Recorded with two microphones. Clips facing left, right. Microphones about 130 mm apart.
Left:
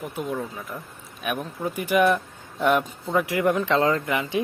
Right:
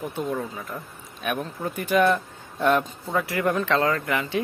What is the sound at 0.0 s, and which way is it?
Speech, centre (ahead or behind).